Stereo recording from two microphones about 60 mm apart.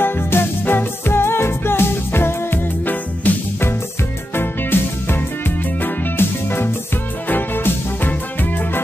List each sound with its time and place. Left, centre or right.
0.0 s music: left